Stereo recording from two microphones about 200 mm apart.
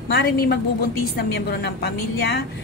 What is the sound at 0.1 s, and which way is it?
A woman's voice, 55° left (ahead or behind).